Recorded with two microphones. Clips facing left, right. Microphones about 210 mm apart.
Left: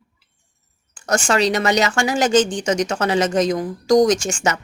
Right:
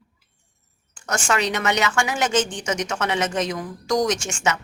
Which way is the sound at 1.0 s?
35° left (ahead or behind).